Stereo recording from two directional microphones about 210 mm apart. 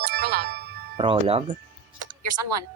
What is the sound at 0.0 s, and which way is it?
Music, 50° right (ahead or behind).